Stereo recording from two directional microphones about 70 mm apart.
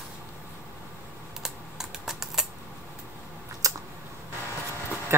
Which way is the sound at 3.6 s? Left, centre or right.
Right.